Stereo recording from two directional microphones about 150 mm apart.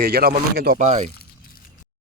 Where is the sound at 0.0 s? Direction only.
90° right.